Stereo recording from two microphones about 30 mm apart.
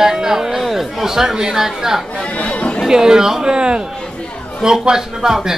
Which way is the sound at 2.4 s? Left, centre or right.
Left.